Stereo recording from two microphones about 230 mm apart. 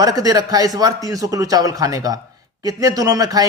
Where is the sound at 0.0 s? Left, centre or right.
Centre.